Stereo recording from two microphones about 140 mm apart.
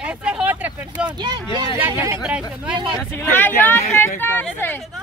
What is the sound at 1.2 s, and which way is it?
Speech, 30° right (ahead or behind).